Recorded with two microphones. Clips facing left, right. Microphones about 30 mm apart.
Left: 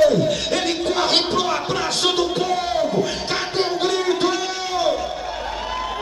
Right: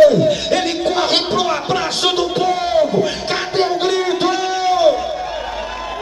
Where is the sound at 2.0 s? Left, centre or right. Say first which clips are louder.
Right 3 dB; centre.